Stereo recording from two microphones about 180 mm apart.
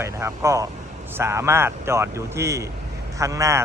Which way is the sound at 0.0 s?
15° right (ahead or behind).